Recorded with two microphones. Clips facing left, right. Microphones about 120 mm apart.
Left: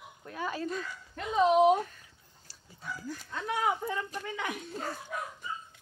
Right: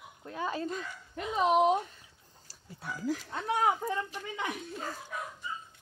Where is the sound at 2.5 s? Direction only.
40° right (ahead or behind).